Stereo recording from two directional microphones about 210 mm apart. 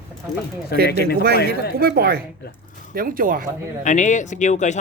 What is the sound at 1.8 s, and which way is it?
Speech, 45° right (ahead or behind).